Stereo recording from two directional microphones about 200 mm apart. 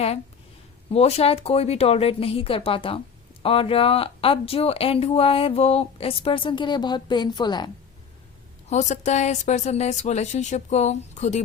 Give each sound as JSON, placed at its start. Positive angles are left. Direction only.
{"t": 0.9, "sound": "speech", "side_deg": 30}
{"t": 8.7, "sound": "speech", "side_deg": 35}